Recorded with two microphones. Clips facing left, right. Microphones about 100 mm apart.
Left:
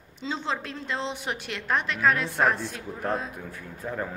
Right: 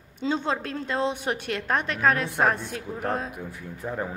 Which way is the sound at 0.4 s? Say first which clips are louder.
Right 3 dB; 45° right (ahead or behind).